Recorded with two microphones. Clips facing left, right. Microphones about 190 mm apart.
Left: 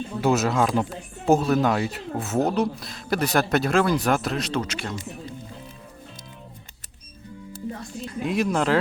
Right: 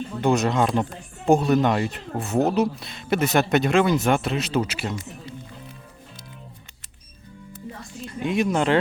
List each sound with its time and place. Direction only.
0.2 s speech: 5° left (ahead or behind)
8.2 s speech: centre (ahead or behind)